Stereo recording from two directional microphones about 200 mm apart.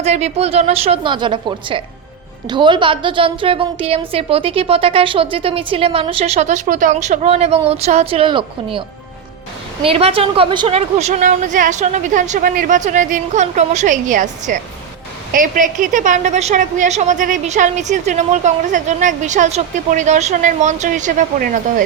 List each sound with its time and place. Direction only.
0.0 s a woman's voice: 30° right (ahead or behind)
9.8 s a woman's voice: 30° right (ahead or behind); by 21.8 s 45° right (ahead or behind)